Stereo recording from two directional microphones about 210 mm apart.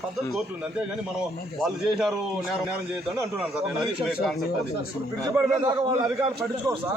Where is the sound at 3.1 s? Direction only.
5° right (ahead or behind).